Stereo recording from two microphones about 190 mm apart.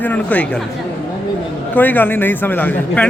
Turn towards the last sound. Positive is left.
turn(degrees=10)  # may be behind; listen again after turning